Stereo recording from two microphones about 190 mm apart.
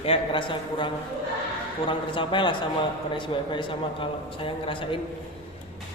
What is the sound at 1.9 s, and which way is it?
A man's voice, 25° left (ahead or behind).